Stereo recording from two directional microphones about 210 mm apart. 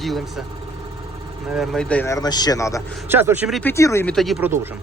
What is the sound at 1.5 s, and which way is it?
Speech, centre (ahead or behind).